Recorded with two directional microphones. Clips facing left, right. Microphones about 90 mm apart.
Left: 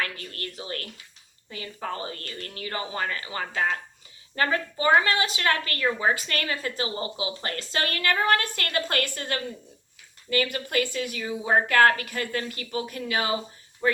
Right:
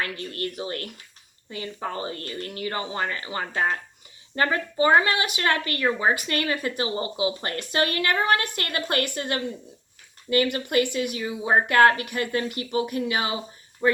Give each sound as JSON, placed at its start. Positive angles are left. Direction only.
{"t": 0.0, "sound": "a woman's voice", "side_deg": -30}
{"t": 13.8, "sound": "speech", "side_deg": -10}